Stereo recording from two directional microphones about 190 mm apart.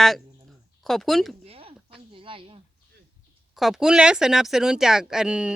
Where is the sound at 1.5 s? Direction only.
30° right (ahead or behind).